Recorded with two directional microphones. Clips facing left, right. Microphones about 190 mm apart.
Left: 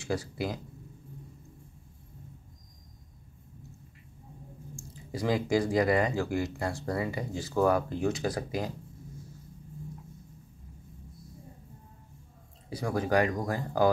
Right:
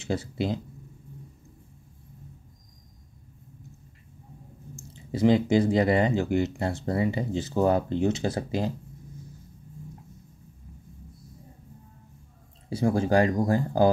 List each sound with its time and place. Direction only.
0.0 s speech: 25° right (ahead or behind)
4.9 s speech: 25° right (ahead or behind)
12.6 s speech: 25° right (ahead or behind)